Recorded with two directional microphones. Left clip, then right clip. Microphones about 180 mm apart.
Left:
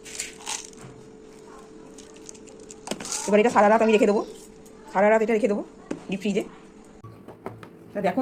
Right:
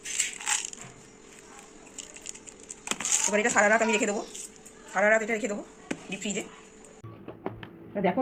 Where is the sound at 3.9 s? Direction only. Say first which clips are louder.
Left 7 dB; 35° left (ahead or behind).